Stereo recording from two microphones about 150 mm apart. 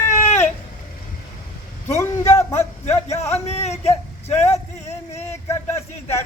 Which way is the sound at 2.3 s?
45° left (ahead or behind).